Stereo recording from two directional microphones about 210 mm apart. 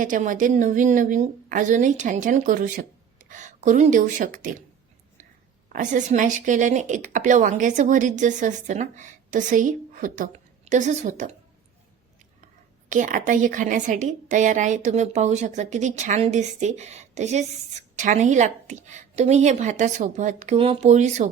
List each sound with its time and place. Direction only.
0.0 s a woman's voice: 40° right (ahead or behind)
5.6 s a woman's voice: 35° right (ahead or behind)
12.9 s a woman's voice: 35° right (ahead or behind)